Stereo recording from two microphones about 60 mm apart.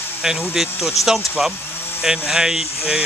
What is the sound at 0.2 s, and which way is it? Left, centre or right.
Speech, centre.